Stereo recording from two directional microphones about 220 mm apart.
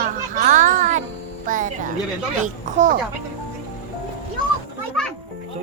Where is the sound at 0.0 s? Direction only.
35° right (ahead or behind).